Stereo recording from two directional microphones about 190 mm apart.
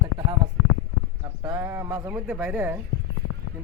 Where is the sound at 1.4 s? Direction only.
20° right (ahead or behind).